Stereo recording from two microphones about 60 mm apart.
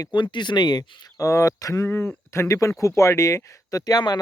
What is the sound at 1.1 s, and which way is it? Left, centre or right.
Speech, left.